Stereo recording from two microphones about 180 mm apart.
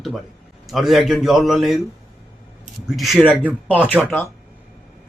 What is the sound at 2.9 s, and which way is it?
Speech, centre (ahead or behind).